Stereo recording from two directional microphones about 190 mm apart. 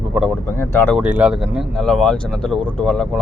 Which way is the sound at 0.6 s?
10° left (ahead or behind).